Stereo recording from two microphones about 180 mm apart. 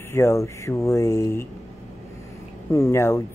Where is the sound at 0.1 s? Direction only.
15° left (ahead or behind).